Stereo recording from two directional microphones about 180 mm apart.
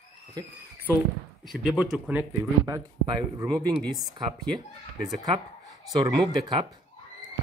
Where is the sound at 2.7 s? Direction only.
20° right (ahead or behind).